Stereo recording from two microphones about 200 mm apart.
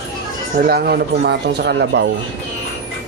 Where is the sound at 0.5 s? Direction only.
50° right (ahead or behind).